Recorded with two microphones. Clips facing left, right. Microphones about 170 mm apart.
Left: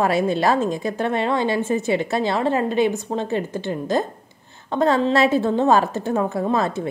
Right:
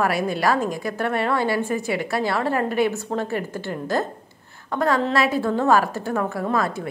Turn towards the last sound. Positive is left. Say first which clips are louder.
# left 2 dB
turn(degrees=25)  # may be behind; listen again after turning